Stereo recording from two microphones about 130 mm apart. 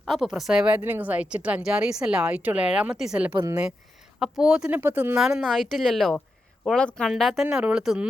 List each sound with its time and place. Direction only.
0.0 s speech: 5° right (ahead or behind)
3.3 s speech: 30° right (ahead or behind)
4.2 s speech: 5° right (ahead or behind)
5.1 s a woman's voice: 5° right (ahead or behind)